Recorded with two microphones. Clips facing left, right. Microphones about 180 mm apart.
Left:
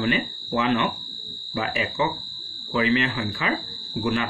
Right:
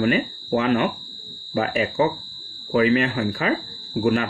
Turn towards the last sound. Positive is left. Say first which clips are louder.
# right 5 dB
turn(degrees=-50)  # may be behind; listen again after turning